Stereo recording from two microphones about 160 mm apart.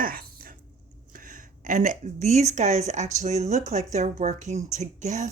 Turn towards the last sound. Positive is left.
turn(degrees=-50)  # may be behind; listen again after turning